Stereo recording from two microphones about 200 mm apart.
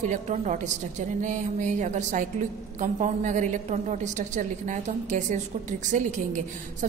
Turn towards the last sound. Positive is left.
turn(degrees=-40)  # may be behind; listen again after turning